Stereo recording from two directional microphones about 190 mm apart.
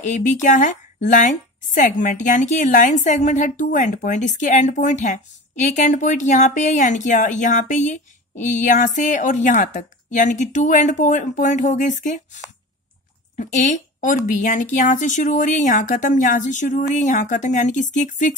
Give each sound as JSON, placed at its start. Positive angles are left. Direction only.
{"t": 0.0, "sound": "a woman's voice", "side_deg": 40}
{"t": 13.4, "sound": "a woman's voice", "side_deg": 40}